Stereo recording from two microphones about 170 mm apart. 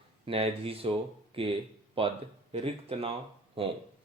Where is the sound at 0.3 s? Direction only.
35° right (ahead or behind).